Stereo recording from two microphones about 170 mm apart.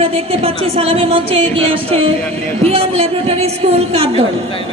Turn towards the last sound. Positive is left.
turn(degrees=-35)  # may be behind; listen again after turning